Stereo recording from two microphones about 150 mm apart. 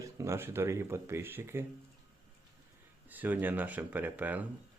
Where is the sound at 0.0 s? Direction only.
20° right (ahead or behind).